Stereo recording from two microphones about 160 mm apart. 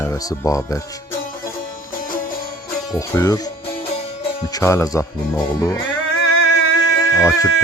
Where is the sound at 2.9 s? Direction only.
20° left (ahead or behind).